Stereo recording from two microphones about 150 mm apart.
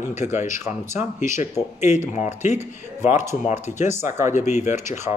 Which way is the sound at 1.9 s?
50° left (ahead or behind).